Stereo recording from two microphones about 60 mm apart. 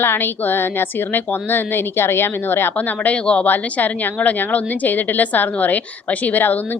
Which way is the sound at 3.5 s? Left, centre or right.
Left.